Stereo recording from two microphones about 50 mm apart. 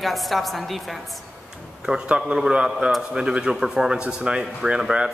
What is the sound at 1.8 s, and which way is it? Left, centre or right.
Speech, centre.